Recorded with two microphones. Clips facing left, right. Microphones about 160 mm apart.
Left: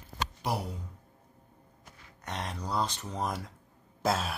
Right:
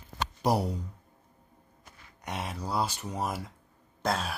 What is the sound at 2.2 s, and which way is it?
Speech, 10° right (ahead or behind).